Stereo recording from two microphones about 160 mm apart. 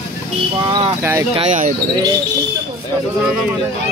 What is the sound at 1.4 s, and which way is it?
Speech, 50° right (ahead or behind).